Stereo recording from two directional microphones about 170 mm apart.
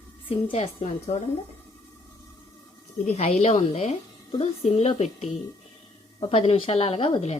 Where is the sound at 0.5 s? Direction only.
40° left (ahead or behind).